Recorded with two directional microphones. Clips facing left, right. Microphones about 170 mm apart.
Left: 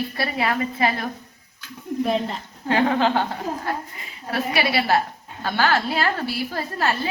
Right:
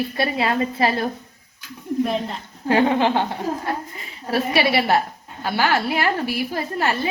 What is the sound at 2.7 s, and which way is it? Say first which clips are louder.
A woman's voice: right 2 dB; 25° right (ahead or behind).